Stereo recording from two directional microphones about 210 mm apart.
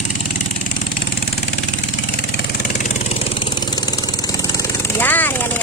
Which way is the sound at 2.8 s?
30° left (ahead or behind).